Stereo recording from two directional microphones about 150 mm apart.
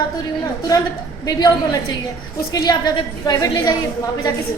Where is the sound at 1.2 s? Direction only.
25° left (ahead or behind).